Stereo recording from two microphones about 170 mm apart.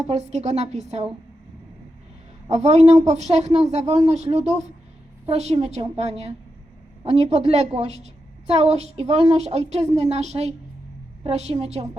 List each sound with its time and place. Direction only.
0.1 s a woman's voice: 40° right (ahead or behind)
2.5 s a woman's voice: 40° right (ahead or behind)